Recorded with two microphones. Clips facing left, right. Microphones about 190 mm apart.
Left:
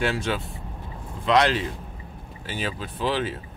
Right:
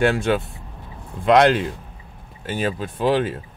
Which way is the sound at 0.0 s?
50° right (ahead or behind).